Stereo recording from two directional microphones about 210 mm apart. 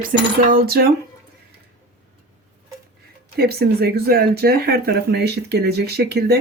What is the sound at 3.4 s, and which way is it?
Speech, 50° right (ahead or behind).